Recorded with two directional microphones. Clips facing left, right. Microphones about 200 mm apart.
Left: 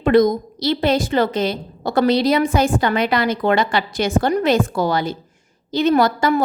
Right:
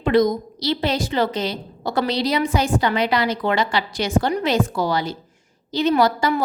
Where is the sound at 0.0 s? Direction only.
50° left (ahead or behind).